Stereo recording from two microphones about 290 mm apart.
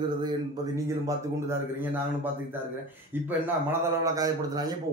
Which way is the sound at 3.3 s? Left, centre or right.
Centre.